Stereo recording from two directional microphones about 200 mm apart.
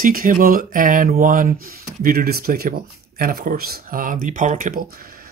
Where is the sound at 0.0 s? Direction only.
45° right (ahead or behind).